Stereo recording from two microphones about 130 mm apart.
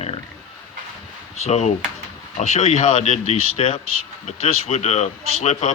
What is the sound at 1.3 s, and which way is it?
Speech, 60° left (ahead or behind).